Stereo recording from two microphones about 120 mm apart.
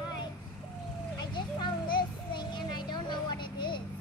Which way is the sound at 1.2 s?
40° left (ahead or behind).